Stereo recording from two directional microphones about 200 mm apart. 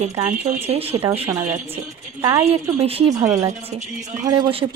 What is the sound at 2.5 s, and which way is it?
Speech, 30° right (ahead or behind).